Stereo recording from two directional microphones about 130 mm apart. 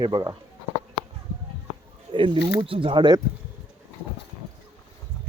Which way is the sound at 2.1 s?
40° right (ahead or behind).